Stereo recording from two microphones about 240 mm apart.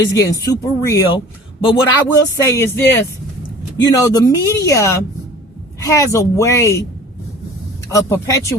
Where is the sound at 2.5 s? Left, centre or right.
Centre.